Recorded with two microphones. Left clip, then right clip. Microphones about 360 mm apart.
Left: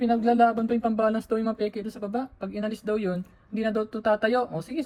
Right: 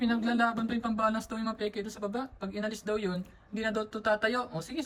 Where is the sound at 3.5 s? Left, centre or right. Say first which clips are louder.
Left 5 dB; centre.